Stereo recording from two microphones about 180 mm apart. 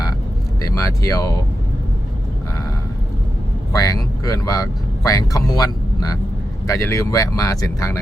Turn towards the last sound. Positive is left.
turn(degrees=20)  # may be behind; listen again after turning